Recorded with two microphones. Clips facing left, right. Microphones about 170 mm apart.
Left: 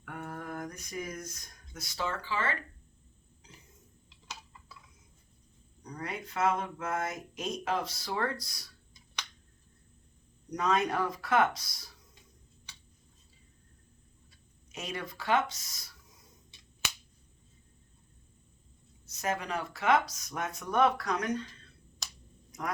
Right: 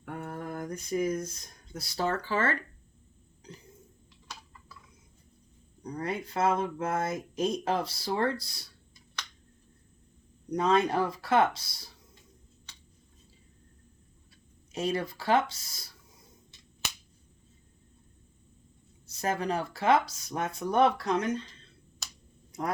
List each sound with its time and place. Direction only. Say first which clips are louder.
0.0 s a sound: right 3 dB; 30° right (ahead or behind)
1.7 s speech: right 5 dB; 35° right (ahead or behind)
5.8 s speech: right 6 dB; 30° right (ahead or behind)
10.5 s speech: right 4 dB; 30° right (ahead or behind)
14.7 s speech: right 9 dB; 30° right (ahead or behind)
19.0 s speech: right 4 dB; 30° right (ahead or behind)
22.5 s speech: right 4 dB; 30° right (ahead or behind)